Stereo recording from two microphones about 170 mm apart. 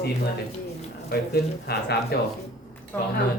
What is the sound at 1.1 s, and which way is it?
Speech, 70° left (ahead or behind).